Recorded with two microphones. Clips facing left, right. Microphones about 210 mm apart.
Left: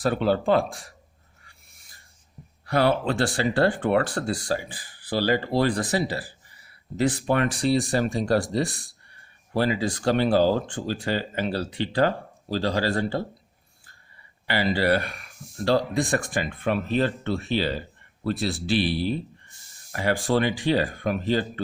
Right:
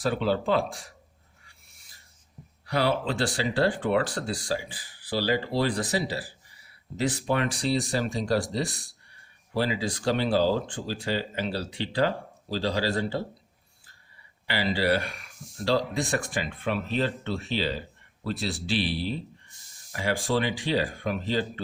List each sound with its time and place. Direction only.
0.0 s speech: 50° left (ahead or behind)
2.6 s speech: 50° left (ahead or behind)
14.4 s speech: 50° left (ahead or behind)